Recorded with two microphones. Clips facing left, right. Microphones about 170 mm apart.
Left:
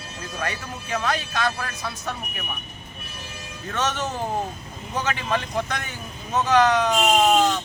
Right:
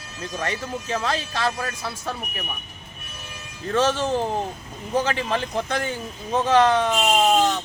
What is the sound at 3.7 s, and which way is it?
Speech, 30° right (ahead or behind).